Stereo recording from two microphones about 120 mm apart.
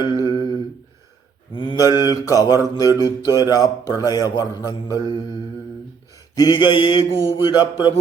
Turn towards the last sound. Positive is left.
turn(degrees=35)  # may be behind; listen again after turning